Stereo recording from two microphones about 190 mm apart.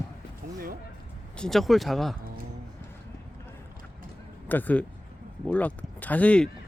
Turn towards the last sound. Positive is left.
turn(degrees=5)  # may be behind; listen again after turning